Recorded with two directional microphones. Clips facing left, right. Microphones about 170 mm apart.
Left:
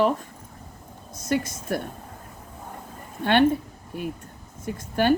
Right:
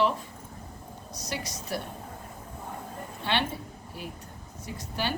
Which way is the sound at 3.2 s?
50° left (ahead or behind).